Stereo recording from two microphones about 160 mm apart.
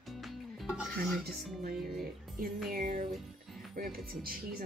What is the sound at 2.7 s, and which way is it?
Speech, 60° right (ahead or behind).